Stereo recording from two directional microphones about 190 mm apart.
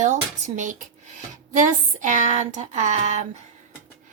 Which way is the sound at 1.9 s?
40° right (ahead or behind).